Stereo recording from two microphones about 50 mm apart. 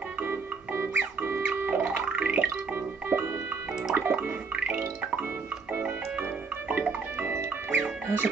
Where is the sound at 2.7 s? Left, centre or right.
Right.